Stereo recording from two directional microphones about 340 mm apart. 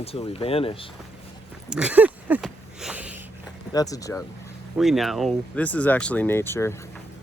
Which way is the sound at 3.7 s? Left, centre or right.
Centre.